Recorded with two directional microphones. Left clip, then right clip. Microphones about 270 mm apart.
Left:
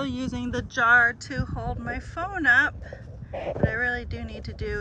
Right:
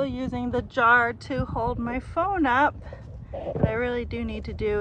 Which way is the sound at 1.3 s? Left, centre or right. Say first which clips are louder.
Right 5 dB; right.